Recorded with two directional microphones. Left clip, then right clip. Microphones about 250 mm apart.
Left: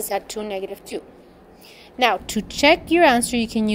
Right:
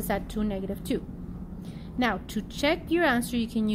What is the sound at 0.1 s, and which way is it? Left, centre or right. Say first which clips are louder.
A woman's voice: left 4 dB; left.